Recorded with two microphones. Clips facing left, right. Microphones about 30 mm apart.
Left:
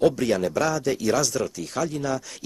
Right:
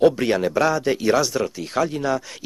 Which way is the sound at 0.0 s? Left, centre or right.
Right.